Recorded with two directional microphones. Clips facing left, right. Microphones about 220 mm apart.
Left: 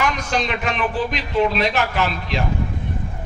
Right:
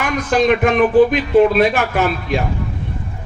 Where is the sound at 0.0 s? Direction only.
50° right (ahead or behind).